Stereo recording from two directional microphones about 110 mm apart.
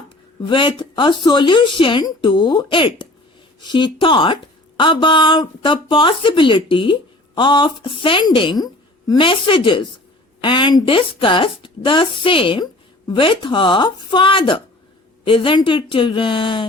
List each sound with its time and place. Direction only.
0.4 s speech: 50° left (ahead or behind)
9.2 s speech: 50° left (ahead or behind)
10.8 s speech: 55° left (ahead or behind)